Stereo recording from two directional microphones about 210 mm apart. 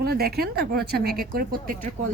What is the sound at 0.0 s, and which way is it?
Speech, 45° right (ahead or behind).